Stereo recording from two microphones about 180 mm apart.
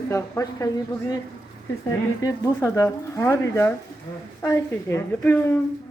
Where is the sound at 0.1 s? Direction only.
15° left (ahead or behind).